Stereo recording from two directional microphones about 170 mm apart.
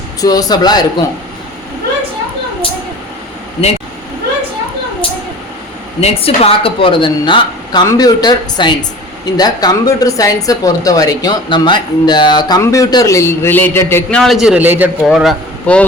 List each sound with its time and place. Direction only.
0.2 s a woman's voice: 20° left (ahead or behind)
6.0 s a woman's voice: 35° left (ahead or behind); by 14.2 s 10° left (ahead or behind)
14.2 s a man's voice: centre (ahead or behind)